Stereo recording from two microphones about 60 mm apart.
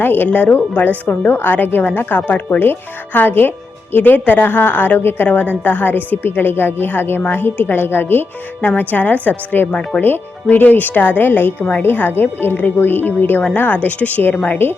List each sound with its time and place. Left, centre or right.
0.0 s a woman's voice: left
0.3 s a woman's voice: left